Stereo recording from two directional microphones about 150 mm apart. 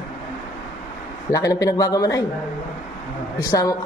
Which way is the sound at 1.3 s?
20° left (ahead or behind).